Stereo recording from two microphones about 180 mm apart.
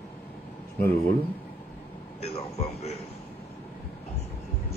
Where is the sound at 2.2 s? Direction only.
35° left (ahead or behind).